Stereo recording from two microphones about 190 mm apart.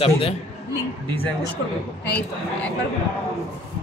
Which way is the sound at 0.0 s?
30° left (ahead or behind).